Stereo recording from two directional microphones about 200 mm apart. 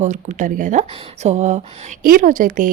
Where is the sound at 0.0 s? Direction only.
35° right (ahead or behind).